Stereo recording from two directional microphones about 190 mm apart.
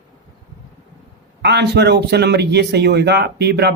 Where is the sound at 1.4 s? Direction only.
60° right (ahead or behind).